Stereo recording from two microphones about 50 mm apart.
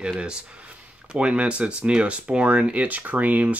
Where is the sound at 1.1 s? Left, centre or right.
Right.